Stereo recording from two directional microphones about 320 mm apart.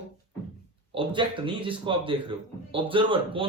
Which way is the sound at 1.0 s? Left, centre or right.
Centre.